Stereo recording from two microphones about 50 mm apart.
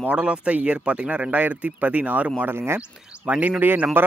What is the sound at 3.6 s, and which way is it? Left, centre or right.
Speech, right.